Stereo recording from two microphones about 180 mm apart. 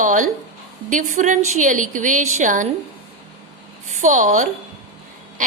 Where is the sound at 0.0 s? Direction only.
45° right (ahead or behind).